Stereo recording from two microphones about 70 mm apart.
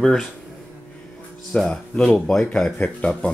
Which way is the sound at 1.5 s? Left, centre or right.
Centre.